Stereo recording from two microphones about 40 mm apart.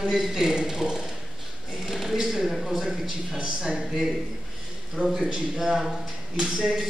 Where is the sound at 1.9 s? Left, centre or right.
Centre.